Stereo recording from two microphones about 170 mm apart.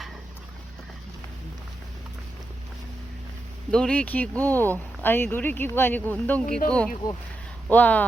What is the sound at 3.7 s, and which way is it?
Speech, 5° left (ahead or behind).